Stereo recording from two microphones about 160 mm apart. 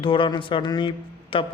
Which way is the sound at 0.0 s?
35° left (ahead or behind).